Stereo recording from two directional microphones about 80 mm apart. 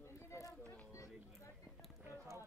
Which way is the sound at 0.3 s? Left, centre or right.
Left.